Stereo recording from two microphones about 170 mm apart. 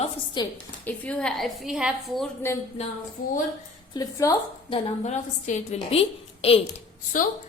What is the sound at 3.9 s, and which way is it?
Speech, 20° left (ahead or behind).